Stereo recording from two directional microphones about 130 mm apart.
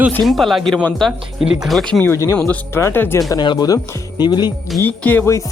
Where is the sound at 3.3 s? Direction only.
35° left (ahead or behind).